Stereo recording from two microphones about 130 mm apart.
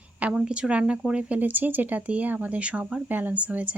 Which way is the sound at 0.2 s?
10° right (ahead or behind).